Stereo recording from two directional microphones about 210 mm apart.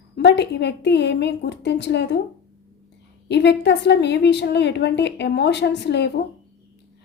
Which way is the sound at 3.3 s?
55° left (ahead or behind).